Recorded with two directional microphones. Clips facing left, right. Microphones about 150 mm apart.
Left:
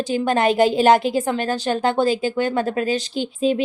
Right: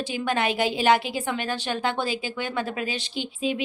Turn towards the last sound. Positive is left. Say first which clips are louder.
# left 7 dB
turn(degrees=40)  # may be behind; listen again after turning